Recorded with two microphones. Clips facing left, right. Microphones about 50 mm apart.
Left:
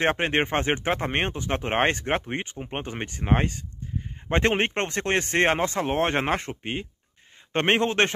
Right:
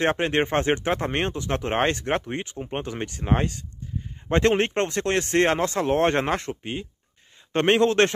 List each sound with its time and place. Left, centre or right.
0.0 s speech: left
5.9 s speech: centre
6.2 s speech: left
6.6 s speech: left
7.5 s speech: left